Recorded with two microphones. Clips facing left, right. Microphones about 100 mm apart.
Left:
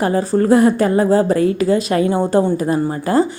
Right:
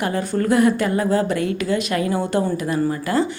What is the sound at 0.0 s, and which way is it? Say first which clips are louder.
A woman's voice: left 6 dB; 35° left (ahead or behind).